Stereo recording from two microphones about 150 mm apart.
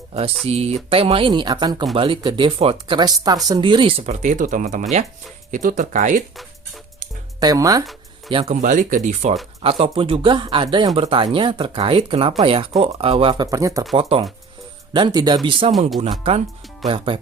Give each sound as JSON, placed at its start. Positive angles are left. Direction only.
{"t": 0.4, "sound": "speech", "side_deg": -45}
{"t": 7.3, "sound": "speech", "side_deg": -25}
{"t": 8.3, "sound": "speech", "side_deg": -35}
{"t": 8.6, "sound": "speech", "side_deg": -60}
{"t": 9.6, "sound": "speech", "side_deg": -40}
{"t": 13.9, "sound": "speech", "side_deg": -40}
{"t": 14.9, "sound": "speech", "side_deg": -30}
{"t": 15.6, "sound": "speech", "side_deg": -40}
{"t": 16.8, "sound": "speech", "side_deg": -35}